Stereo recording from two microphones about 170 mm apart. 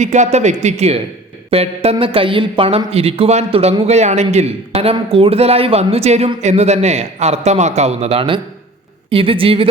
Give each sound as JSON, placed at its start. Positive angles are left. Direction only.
{"t": 0.0, "sound": "speech", "side_deg": -45}